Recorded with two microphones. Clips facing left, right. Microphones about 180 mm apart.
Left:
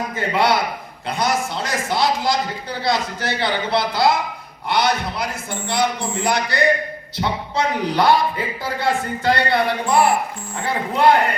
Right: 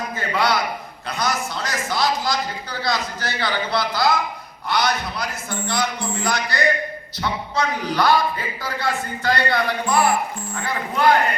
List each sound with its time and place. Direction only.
0.2 s a man's voice: 25° left (ahead or behind)